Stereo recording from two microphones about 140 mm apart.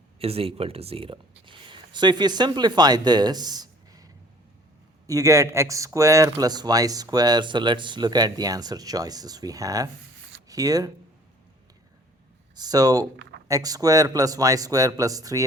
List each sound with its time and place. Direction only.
0.2 s speech: 45° right (ahead or behind); by 10.9 s 25° right (ahead or behind)
12.5 s speech: 25° right (ahead or behind)